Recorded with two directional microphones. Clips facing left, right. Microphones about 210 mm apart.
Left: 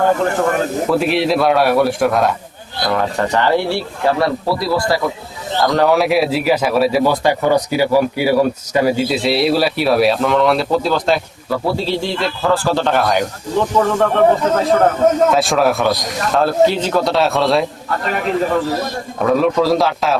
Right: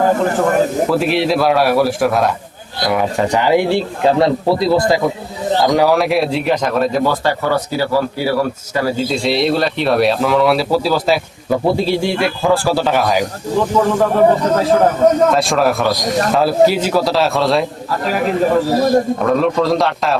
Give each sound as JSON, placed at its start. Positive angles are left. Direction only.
{"t": 0.9, "sound": "speech", "side_deg": 0}
{"t": 5.9, "sound": "speech", "side_deg": 0}
{"t": 11.4, "sound": "speech", "side_deg": -20}